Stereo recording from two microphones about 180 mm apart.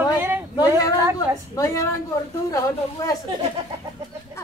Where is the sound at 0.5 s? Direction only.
20° left (ahead or behind).